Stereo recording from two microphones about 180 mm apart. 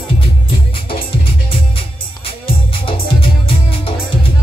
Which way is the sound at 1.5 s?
30° left (ahead or behind).